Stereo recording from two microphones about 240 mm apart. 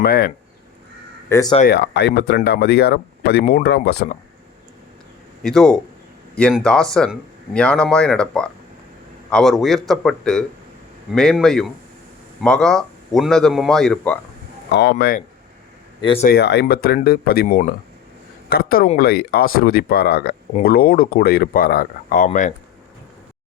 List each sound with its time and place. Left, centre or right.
0.0 s speech: left
1.3 s speech: centre
1.6 s speech: left
5.4 s a man's voice: centre
14.7 s speech: left
16.2 s speech: left